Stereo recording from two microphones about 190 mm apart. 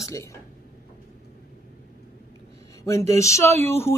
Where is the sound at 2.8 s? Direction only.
15° left (ahead or behind).